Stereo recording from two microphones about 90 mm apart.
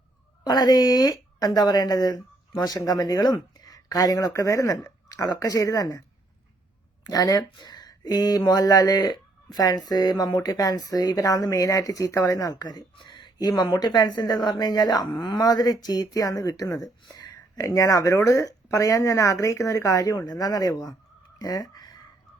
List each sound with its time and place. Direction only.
0.4 s speech: 45° left (ahead or behind)
7.1 s speech: 45° left (ahead or behind)
13.0 s speech: 60° left (ahead or behind); by 20.9 s 45° left (ahead or behind)
21.3 s a sound: 45° left (ahead or behind)